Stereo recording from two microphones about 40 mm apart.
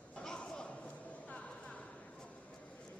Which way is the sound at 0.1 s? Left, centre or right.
Centre.